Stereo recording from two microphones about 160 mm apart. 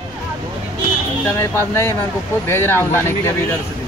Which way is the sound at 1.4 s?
15° left (ahead or behind).